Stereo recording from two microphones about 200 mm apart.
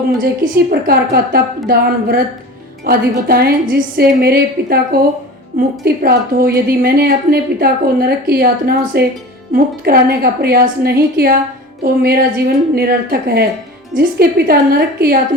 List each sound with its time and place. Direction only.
0.2 s a woman's voice: 50° right (ahead or behind)